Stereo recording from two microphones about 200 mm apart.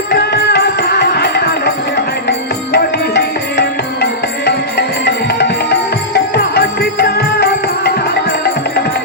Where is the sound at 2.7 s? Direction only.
55° left (ahead or behind).